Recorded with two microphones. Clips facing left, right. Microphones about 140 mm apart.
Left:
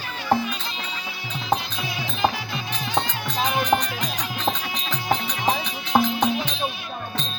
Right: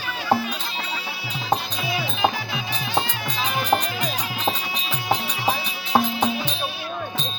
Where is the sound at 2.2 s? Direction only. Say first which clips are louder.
Left 1 dB; 5° right (ahead or behind).